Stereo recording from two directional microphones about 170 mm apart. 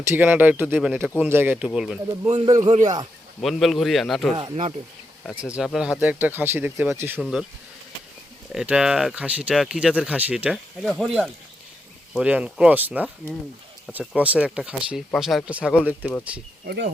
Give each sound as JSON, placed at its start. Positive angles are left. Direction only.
{"t": 0.1, "sound": "speech", "side_deg": -10}
{"t": 2.2, "sound": "a man's voice", "side_deg": -35}
{"t": 3.4, "sound": "speech", "side_deg": 0}
{"t": 4.4, "sound": "a man's voice", "side_deg": -35}
{"t": 5.4, "sound": "speech", "side_deg": -5}
{"t": 8.5, "sound": "speech", "side_deg": -5}
{"t": 16.6, "sound": "speech", "side_deg": -85}